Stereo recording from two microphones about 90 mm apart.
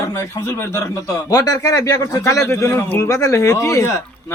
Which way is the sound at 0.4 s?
30° left (ahead or behind).